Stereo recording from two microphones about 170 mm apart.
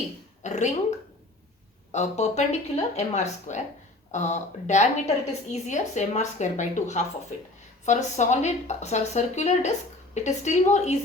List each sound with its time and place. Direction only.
0.4 s a woman's voice: 45° left (ahead or behind)